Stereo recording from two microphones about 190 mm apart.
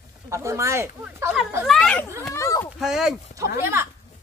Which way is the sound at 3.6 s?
15° right (ahead or behind).